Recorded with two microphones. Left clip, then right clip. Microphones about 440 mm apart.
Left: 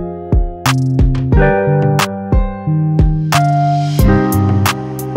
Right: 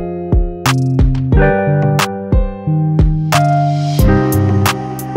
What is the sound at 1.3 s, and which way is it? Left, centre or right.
Music, right.